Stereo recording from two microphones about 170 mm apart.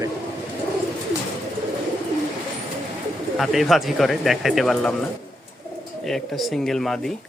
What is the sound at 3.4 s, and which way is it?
Speech, centre (ahead or behind).